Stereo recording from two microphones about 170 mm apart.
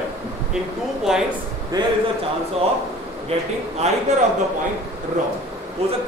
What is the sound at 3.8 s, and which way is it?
Speech, 40° right (ahead or behind).